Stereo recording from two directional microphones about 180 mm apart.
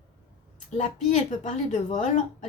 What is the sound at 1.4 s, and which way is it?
Speech, 45° left (ahead or behind).